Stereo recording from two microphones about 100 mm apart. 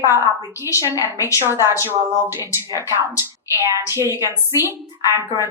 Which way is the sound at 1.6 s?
25° right (ahead or behind).